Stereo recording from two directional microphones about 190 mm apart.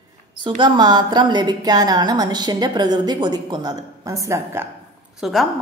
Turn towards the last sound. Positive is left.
turn(degrees=0)  # may be behind; listen again after turning